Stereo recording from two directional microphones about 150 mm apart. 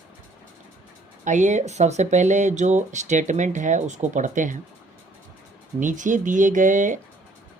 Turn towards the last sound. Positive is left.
turn(degrees=-60)  # may be behind; listen again after turning